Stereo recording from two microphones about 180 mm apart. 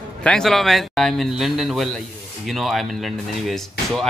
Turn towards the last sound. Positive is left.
turn(degrees=0)  # may be behind; listen again after turning